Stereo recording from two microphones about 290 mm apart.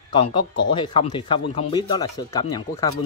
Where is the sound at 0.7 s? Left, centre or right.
Centre.